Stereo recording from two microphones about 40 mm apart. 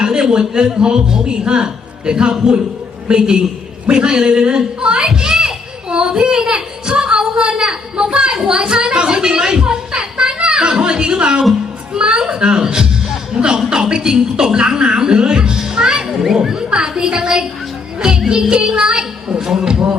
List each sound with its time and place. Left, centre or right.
0.0 s a man's voice: centre
5.9 s a sound: right
11.9 s a man's voice: right